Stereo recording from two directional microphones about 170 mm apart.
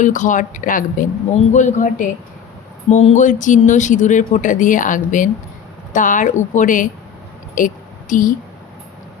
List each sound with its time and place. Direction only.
0.0 s speech: 45° left (ahead or behind)